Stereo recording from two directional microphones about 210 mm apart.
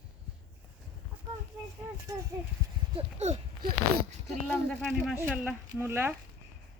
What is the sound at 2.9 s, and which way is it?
Speech, 30° right (ahead or behind).